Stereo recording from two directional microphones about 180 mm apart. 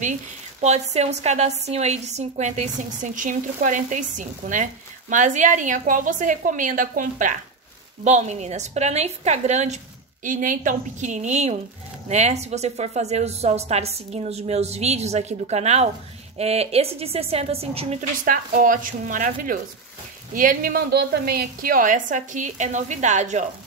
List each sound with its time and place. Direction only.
0.6 s a woman's voice: 40° right (ahead or behind)
18.2 s a woman's voice: 50° right (ahead or behind)